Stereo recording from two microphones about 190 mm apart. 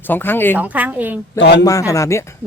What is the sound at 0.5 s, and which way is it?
Speech, 10° right (ahead or behind).